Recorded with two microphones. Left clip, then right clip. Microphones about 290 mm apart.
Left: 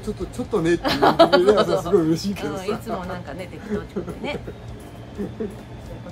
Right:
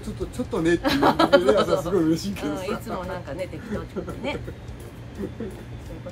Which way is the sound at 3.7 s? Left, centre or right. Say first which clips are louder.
Left 9 dB; left.